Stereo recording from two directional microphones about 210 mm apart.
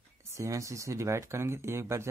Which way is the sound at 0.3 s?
15° right (ahead or behind).